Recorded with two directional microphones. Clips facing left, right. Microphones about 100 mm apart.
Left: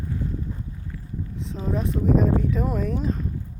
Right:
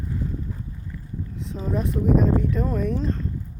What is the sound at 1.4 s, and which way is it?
Speech, centre (ahead or behind).